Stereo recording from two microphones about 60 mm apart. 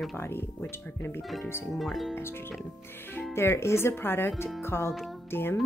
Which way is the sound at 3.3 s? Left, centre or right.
Left.